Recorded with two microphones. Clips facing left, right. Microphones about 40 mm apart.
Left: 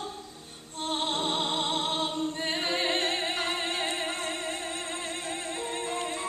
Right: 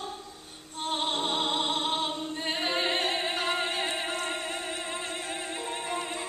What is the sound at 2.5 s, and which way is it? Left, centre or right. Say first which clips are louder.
Music: right 1 dB; right.